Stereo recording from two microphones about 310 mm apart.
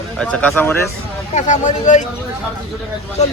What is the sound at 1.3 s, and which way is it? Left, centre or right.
Speech, left.